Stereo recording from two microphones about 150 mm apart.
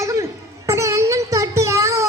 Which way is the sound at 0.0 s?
20° right (ahead or behind).